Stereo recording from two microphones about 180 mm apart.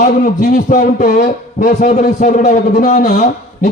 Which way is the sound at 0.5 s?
45° left (ahead or behind).